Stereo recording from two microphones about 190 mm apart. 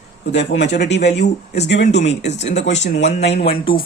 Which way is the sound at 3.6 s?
25° left (ahead or behind).